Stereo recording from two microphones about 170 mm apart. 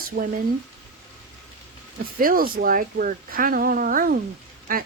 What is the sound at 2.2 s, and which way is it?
Speech, 55° right (ahead or behind).